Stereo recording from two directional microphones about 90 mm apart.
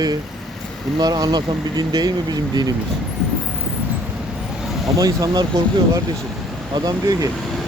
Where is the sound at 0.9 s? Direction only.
50° right (ahead or behind).